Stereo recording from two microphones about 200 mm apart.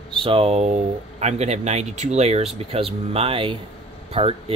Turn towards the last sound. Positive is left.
turn(degrees=-30)  # may be behind; listen again after turning